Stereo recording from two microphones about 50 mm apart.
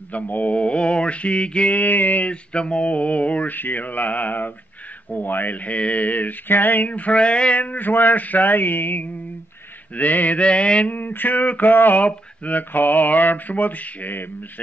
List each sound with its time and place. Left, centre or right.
0.1 s mantra: left
2.2 s speech: left
9.9 s mantra: left
10.9 s speech: left